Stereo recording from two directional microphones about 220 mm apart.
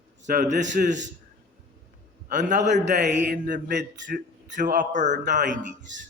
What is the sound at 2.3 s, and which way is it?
A man's voice, 35° right (ahead or behind).